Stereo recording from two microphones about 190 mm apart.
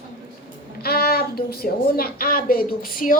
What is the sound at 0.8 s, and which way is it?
A woman's voice, 55° left (ahead or behind).